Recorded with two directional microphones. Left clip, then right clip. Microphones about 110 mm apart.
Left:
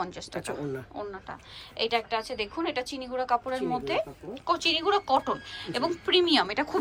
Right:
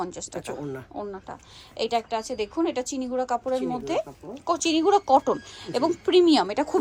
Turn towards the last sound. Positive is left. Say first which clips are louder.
# right 4 dB
turn(degrees=-50)  # may be behind; listen again after turning